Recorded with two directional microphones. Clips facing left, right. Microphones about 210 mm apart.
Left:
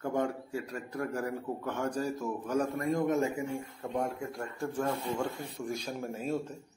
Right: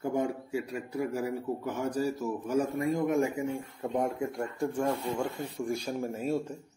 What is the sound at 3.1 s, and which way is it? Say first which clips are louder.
A man's voice: right 2 dB; 15° right (ahead or behind).